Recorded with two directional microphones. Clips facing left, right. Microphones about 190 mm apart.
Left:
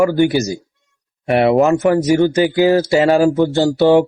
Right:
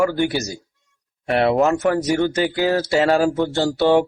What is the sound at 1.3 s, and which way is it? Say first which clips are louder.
Speech: left 4 dB; 15° left (ahead or behind).